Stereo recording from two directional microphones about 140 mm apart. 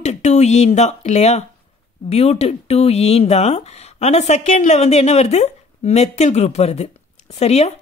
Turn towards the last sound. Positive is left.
turn(degrees=50)  # may be behind; listen again after turning